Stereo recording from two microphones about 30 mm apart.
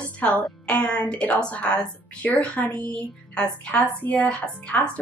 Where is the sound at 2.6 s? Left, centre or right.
Left.